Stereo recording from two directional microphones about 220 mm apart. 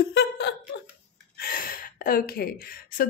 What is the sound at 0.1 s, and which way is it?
Laughter, 50° left (ahead or behind).